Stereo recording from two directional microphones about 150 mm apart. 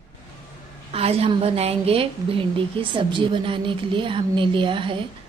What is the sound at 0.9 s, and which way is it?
A woman's voice, 40° right (ahead or behind).